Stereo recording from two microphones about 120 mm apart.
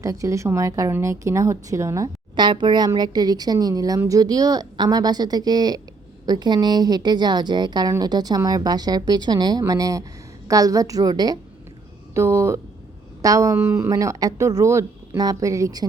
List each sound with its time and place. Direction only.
0.0 s speech: 25° right (ahead or behind)
2.3 s a woman's voice: 40° right (ahead or behind)
12.1 s a woman's voice: 25° right (ahead or behind)